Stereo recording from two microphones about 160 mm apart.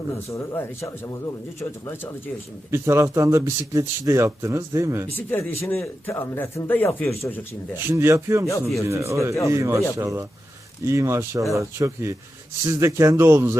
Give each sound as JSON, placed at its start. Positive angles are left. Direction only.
{"t": 0.3, "sound": "speech", "side_deg": 20}
{"t": 2.6, "sound": "speech", "side_deg": -15}
{"t": 5.1, "sound": "speech", "side_deg": 15}
{"t": 7.9, "sound": "a man's voice", "side_deg": -15}